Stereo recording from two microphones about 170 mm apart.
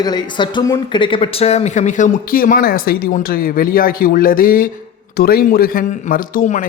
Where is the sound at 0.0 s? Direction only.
25° left (ahead or behind).